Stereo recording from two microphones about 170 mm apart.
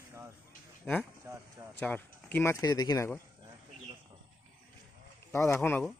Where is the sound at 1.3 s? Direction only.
15° right (ahead or behind).